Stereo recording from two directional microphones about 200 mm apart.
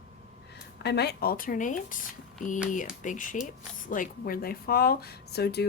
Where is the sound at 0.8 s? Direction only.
55° left (ahead or behind).